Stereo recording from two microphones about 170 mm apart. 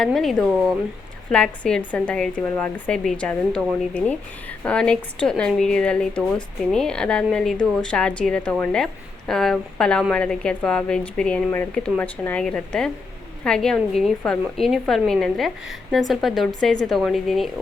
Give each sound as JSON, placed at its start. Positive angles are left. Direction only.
{"t": 0.0, "sound": "a woman's voice", "side_deg": 0}